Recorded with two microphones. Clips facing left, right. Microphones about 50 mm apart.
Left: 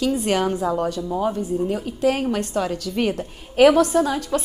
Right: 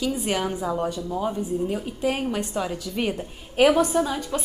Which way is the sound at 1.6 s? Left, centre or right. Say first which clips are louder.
Left 7 dB; centre.